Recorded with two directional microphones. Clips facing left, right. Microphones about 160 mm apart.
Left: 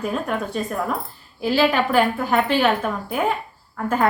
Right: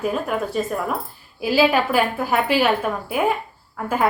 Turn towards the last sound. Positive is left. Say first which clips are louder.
# left 1 dB
turn(degrees=-5)  # may be behind; listen again after turning